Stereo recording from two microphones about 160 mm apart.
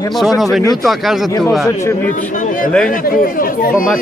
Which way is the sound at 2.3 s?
55° left (ahead or behind).